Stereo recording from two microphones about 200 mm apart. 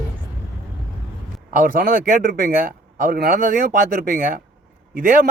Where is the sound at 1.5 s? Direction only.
45° right (ahead or behind).